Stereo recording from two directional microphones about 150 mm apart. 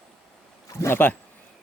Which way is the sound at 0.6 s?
15° left (ahead or behind).